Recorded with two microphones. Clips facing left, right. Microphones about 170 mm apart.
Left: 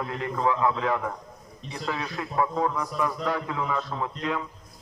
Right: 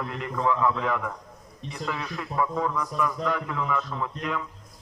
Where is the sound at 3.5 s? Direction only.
15° left (ahead or behind).